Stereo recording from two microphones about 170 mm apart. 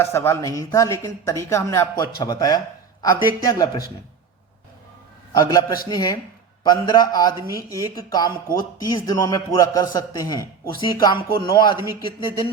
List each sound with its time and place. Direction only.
0.0 s speech: 15° left (ahead or behind)
5.3 s speech: 25° left (ahead or behind)
7.3 s speech: 15° right (ahead or behind)
7.9 s speech: 25° left (ahead or behind)